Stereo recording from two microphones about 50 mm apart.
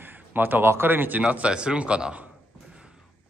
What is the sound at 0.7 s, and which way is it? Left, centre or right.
Speech, right.